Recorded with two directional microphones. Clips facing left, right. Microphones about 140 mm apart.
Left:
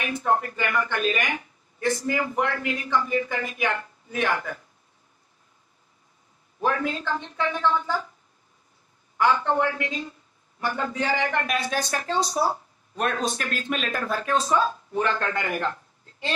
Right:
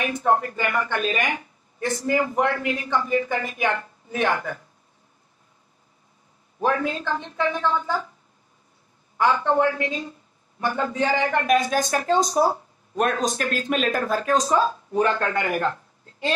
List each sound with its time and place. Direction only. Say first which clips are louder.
0.0 s a man's voice: right 3 dB; 35° right (ahead or behind)
6.9 s a man's voice: right 2 dB; 35° right (ahead or behind)
9.2 s a man's voice: right 2 dB; 35° right (ahead or behind)